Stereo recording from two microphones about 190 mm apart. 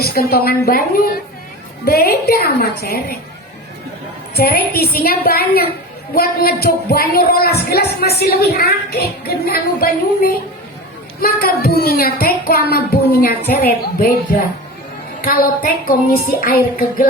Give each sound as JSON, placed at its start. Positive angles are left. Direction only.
{"t": 0.0, "sound": "music", "side_deg": 55}
{"t": 1.8, "sound": "speech", "side_deg": 55}
{"t": 4.4, "sound": "music", "side_deg": 55}
{"t": 6.1, "sound": "speech", "side_deg": 55}
{"t": 11.2, "sound": "music", "side_deg": 50}
{"t": 15.2, "sound": "music", "side_deg": 50}